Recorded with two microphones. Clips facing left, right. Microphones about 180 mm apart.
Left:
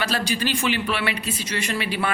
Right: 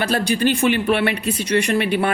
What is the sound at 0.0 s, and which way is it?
Speech, 55° right (ahead or behind).